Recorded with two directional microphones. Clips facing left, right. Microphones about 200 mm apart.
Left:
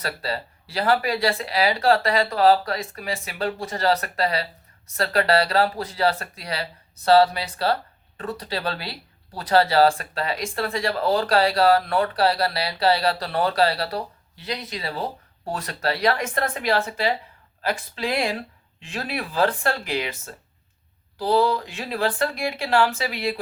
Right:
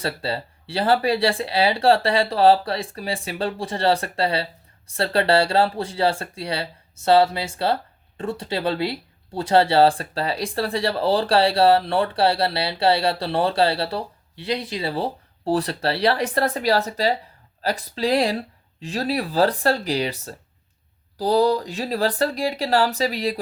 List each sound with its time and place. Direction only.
0.0 s speech: 30° right (ahead or behind)